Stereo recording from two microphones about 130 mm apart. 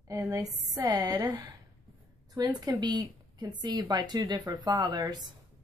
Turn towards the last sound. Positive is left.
turn(degrees=-30)  # may be behind; listen again after turning